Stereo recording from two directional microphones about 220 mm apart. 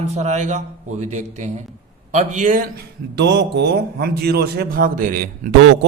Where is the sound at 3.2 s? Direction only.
50° right (ahead or behind).